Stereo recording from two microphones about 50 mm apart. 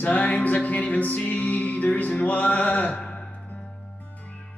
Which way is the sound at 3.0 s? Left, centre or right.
Centre.